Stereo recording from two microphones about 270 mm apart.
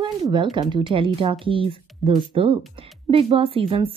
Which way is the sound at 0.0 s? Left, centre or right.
Centre.